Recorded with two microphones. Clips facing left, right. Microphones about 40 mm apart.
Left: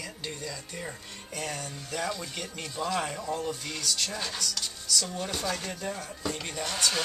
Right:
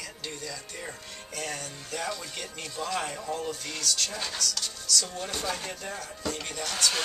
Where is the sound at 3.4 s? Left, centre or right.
Centre.